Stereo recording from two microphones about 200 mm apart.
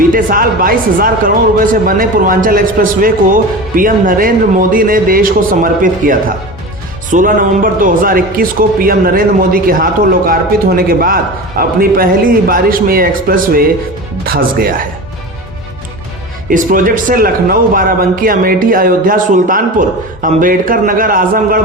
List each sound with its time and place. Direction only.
0.1 s speech: 45° right (ahead or behind)
16.5 s speech: 40° right (ahead or behind)